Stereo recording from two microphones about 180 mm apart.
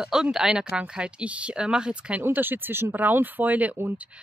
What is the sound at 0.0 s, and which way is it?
Speech, 5° right (ahead or behind).